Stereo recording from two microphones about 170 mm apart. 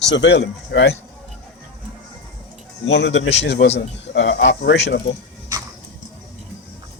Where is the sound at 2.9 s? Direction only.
90° left.